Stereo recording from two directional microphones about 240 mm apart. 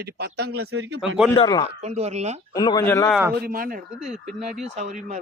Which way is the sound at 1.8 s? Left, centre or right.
Right.